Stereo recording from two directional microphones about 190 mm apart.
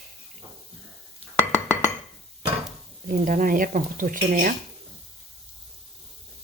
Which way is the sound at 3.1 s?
45° right (ahead or behind).